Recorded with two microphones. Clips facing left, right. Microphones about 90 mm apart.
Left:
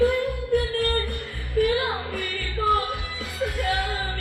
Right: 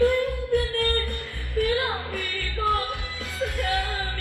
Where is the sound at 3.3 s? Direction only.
20° left (ahead or behind).